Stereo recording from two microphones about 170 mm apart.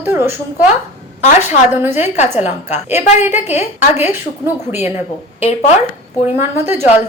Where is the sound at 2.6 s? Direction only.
40° left (ahead or behind).